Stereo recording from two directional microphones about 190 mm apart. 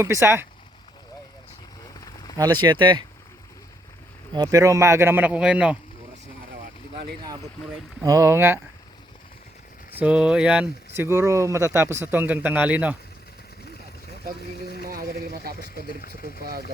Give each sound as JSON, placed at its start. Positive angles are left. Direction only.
{"t": 0.0, "sound": "speech", "side_deg": -15}
{"t": 2.3, "sound": "speech", "side_deg": -20}
{"t": 4.4, "sound": "speech", "side_deg": -15}
{"t": 8.0, "sound": "speech", "side_deg": -15}
{"t": 10.0, "sound": "speech", "side_deg": -5}
{"t": 14.8, "sound": "a sound", "side_deg": -50}
{"t": 16.0, "sound": "speech", "side_deg": 50}
{"t": 16.4, "sound": "speech", "side_deg": -55}